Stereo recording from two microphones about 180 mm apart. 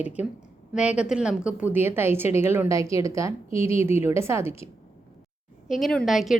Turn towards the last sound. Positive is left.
turn(degrees=0)  # may be behind; listen again after turning